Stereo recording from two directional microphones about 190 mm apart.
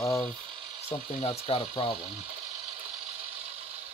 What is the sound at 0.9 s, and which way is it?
Speech, 30° left (ahead or behind).